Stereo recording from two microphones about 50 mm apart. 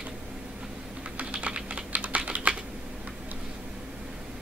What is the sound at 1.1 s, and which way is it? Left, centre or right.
Typing, right.